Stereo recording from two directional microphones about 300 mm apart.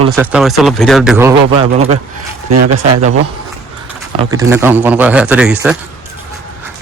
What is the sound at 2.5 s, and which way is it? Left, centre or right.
Speech, right.